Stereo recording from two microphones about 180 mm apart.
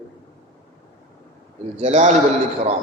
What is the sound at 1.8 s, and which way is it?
Speech, 40° right (ahead or behind).